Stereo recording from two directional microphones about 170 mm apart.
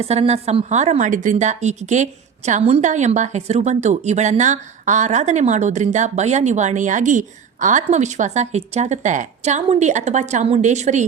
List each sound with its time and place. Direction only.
0.0 s a woman's voice: 35° right (ahead or behind)